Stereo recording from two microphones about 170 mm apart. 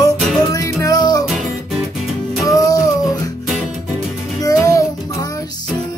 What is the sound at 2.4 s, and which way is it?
Music, 20° left (ahead or behind).